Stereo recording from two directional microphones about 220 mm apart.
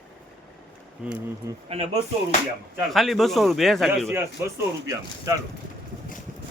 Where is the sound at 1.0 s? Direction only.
5° right (ahead or behind).